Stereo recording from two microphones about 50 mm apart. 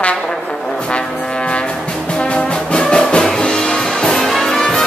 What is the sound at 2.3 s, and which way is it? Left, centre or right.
Music, centre.